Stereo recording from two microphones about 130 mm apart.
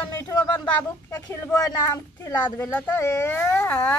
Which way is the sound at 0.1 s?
20° left (ahead or behind).